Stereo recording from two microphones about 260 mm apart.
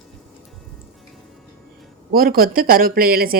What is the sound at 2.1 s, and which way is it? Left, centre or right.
Speech, right.